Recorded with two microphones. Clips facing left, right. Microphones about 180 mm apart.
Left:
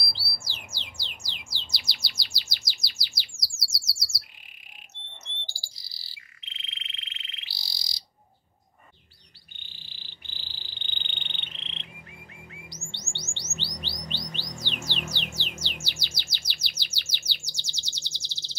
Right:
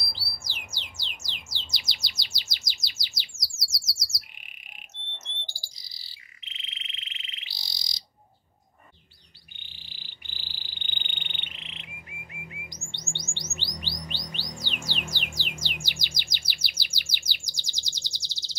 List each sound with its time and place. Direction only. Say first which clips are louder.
0.1 s bird: left 1 dB; 15° right (ahead or behind)
9.6 s insect: even; 15° right (ahead or behind)
12.9 s chirp: right 1 dB; 15° right (ahead or behind)
14.6 s music: left 2 dB; 10° right (ahead or behind)